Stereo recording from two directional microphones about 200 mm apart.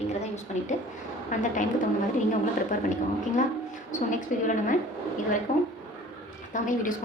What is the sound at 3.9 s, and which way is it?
Speech, 40° left (ahead or behind).